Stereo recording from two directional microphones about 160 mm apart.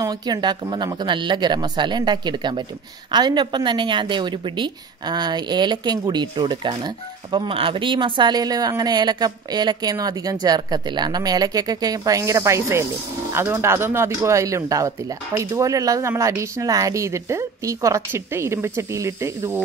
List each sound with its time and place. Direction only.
0.0 s a woman's voice: 25° right (ahead or behind)